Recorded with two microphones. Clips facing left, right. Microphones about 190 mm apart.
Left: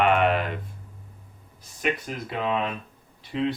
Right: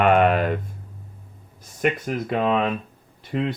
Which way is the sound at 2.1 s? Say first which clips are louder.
Right 6 dB; 55° right (ahead or behind).